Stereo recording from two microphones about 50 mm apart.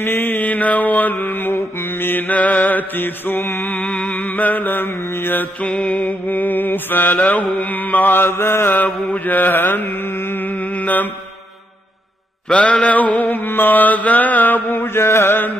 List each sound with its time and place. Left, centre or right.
0.0 s mantra: left
3.8 s mantra: left
5.7 s mantra: left
6.0 s mantra: left
9.1 s mantra: left
12.4 s mantra: left
13.2 s mantra: left